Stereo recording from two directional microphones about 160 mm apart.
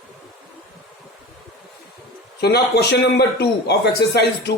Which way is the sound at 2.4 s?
90° left.